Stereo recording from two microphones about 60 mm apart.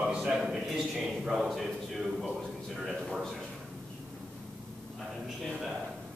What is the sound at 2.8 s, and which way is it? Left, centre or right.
Speech, centre.